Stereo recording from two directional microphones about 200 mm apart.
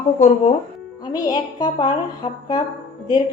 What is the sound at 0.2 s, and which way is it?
Speech, 35° left (ahead or behind).